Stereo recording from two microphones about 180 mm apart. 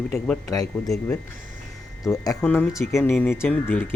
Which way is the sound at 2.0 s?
20° left (ahead or behind).